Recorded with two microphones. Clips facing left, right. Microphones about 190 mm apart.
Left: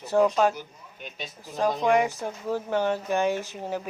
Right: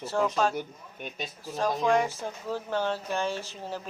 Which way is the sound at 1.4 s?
15° left (ahead or behind).